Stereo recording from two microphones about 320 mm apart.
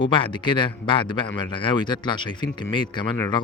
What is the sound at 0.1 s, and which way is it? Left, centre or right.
Speech, centre.